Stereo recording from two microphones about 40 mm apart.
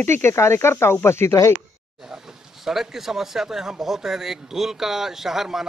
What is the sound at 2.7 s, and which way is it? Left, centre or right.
Speech, centre.